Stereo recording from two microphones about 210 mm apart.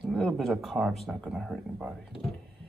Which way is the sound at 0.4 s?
Centre (ahead or behind).